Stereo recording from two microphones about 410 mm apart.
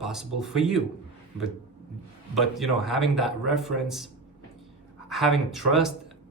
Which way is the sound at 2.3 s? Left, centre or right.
Centre.